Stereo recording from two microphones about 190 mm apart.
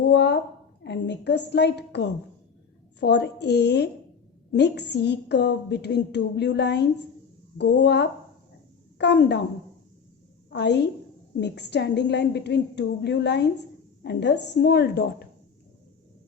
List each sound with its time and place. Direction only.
0.0 s a sound: 65° left (ahead or behind)
0.9 s a woman's voice: 65° left (ahead or behind)
10.5 s a woman's voice: 65° left (ahead or behind)